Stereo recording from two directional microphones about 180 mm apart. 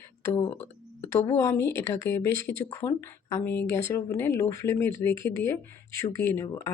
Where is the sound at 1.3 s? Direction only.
15° left (ahead or behind).